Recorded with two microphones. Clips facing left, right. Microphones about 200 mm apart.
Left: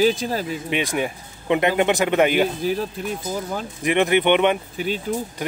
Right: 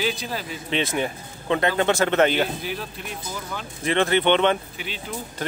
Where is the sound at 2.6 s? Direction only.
40° left (ahead or behind).